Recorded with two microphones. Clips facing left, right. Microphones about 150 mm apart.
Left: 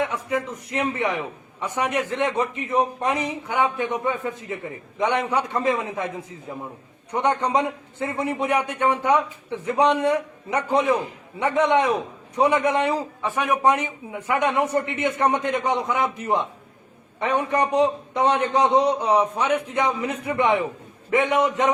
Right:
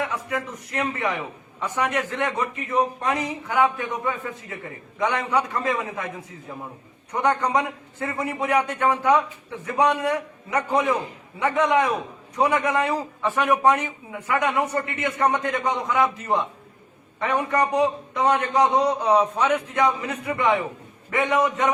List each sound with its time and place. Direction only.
0.0 s a man's voice: 20° left (ahead or behind)